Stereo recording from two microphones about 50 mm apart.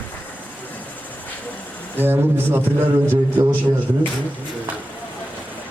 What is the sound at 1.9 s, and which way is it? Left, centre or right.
Speech, right.